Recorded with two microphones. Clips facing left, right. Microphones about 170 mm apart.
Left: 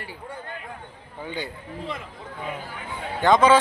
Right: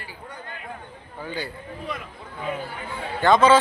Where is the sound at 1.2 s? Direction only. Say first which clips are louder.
Even; 20° left (ahead or behind).